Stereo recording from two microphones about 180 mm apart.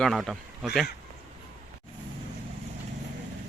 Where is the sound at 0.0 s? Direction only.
Centre (ahead or behind).